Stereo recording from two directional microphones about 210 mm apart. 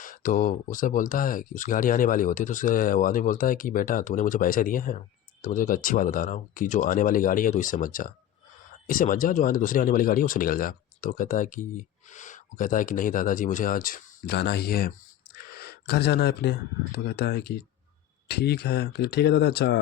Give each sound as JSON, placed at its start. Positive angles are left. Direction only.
{"t": 0.0, "sound": "speech", "side_deg": 40}